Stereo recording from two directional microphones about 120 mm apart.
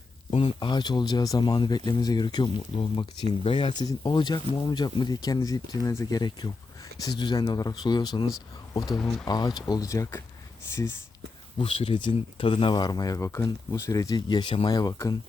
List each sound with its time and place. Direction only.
0.3 s speech: 50° left (ahead or behind)
8.9 s speech: 5° left (ahead or behind)
9.2 s speech: 35° left (ahead or behind)
11.5 s speech: 50° left (ahead or behind)
14.7 s speech: 30° left (ahead or behind)